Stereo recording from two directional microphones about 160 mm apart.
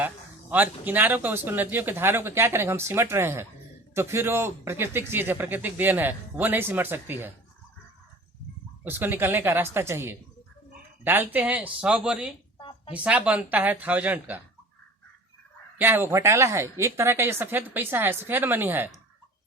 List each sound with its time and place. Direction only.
0.5 s speech: 10° right (ahead or behind)
8.8 s speech: 10° right (ahead or behind)
12.5 s a sound: 30° left (ahead or behind)
12.9 s speech: 10° right (ahead or behind)
15.8 s speech: 15° right (ahead or behind)